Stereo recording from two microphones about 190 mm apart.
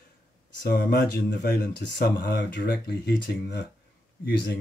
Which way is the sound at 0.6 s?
50° left (ahead or behind).